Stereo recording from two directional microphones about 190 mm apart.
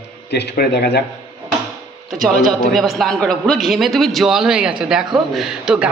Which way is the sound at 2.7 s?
Centre (ahead or behind).